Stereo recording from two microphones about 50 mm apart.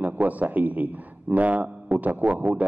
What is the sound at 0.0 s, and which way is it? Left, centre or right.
A man's voice, right.